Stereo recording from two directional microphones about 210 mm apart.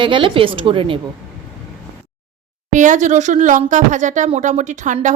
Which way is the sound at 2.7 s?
35° right (ahead or behind).